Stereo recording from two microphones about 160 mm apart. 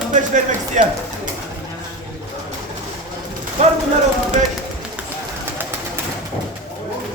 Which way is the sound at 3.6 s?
45° right (ahead or behind).